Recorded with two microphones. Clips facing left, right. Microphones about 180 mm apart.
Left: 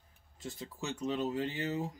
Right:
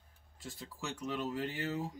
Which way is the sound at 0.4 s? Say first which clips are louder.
Left 3 dB; 20° left (ahead or behind).